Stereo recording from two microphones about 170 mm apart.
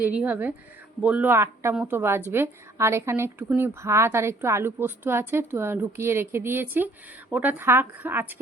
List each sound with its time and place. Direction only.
0.0 s a woman's voice: 10° right (ahead or behind)